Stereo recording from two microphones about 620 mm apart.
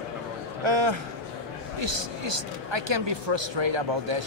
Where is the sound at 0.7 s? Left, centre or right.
Right.